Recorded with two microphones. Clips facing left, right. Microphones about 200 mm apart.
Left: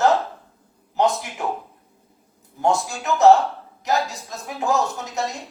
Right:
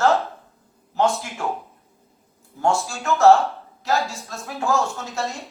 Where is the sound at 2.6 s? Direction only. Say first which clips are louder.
Left 1 dB; 20° left (ahead or behind).